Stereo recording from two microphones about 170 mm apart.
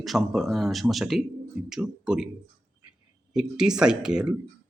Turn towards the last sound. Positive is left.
turn(degrees=-5)  # may be behind; listen again after turning